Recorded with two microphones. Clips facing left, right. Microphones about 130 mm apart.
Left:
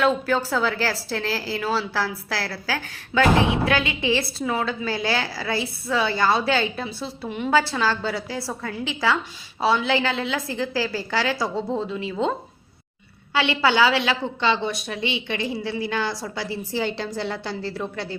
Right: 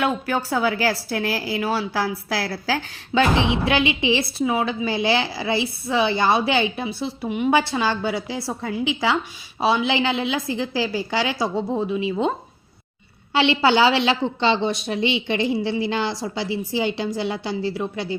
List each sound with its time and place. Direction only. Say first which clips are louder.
0.0 s a woman's voice: left 2 dB; 15° right (ahead or behind)
13.3 s a woman's voice: right 3 dB; 25° right (ahead or behind)